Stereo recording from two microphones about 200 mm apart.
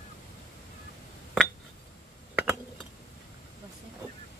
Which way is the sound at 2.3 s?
10° right (ahead or behind).